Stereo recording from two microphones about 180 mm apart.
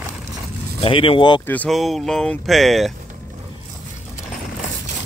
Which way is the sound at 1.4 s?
5° left (ahead or behind).